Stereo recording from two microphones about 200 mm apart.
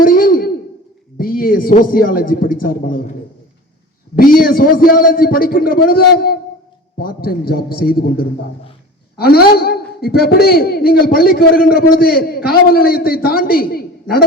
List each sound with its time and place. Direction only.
0.0 s sigh: 45° left (ahead or behind)
1.2 s a man's voice: 45° left (ahead or behind)
4.1 s a man's voice: 45° left (ahead or behind)